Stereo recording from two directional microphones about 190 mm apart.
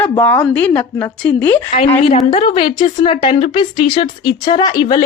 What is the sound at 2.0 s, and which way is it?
Speech, 30° left (ahead or behind).